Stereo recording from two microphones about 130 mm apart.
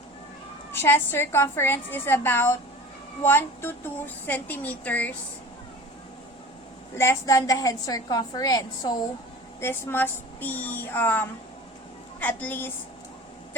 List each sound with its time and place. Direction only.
0.7 s a woman's voice: 20° left (ahead or behind)
6.9 s a woman's voice: 20° left (ahead or behind)